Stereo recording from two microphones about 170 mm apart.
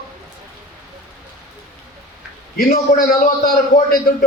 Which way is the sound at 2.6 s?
45° left (ahead or behind).